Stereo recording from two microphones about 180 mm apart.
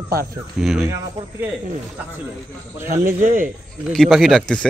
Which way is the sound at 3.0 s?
45° right (ahead or behind).